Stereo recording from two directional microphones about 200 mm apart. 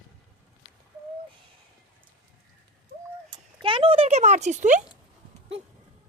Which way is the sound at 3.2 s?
20° right (ahead or behind).